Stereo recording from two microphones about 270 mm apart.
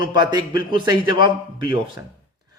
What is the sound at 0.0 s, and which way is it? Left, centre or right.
Speech, centre.